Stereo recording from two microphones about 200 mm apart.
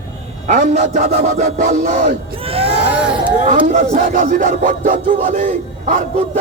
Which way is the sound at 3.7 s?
40° right (ahead or behind).